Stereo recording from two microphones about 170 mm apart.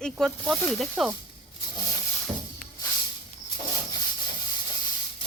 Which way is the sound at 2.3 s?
30° right (ahead or behind).